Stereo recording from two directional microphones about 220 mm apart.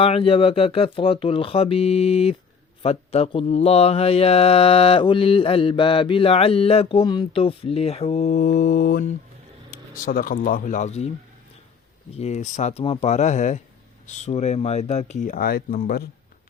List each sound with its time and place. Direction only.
0.0 s speech: 25° left (ahead or behind)
12.1 s speech: 30° left (ahead or behind)